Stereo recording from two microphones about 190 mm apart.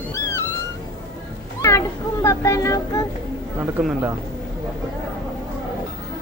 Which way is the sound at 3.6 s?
10° right (ahead or behind).